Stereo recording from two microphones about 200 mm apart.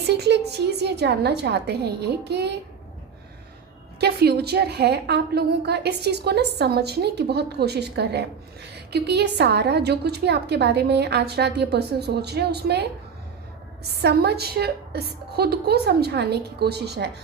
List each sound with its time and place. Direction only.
0.1 s a woman's voice: 55° right (ahead or behind)
4.0 s a woman's voice: 55° right (ahead or behind)
13.9 s a woman's voice: 55° right (ahead or behind)